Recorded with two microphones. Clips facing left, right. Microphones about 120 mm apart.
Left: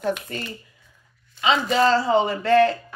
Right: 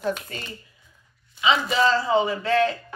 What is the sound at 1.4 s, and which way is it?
Speech, 55° left (ahead or behind).